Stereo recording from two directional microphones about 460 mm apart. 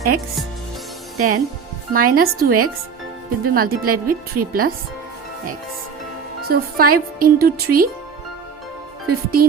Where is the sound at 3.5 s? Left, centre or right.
Centre.